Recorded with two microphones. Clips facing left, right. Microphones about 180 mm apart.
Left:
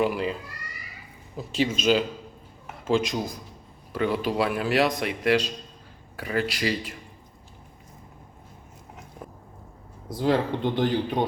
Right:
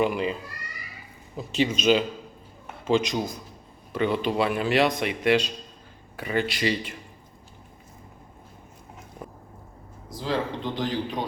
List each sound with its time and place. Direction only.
0.0 s speech: centre (ahead or behind)
1.4 s speech: 5° left (ahead or behind)
10.2 s speech: 55° left (ahead or behind)